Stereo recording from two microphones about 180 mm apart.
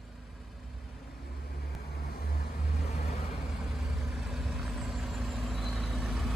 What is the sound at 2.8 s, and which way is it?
Vehicle, 35° left (ahead or behind).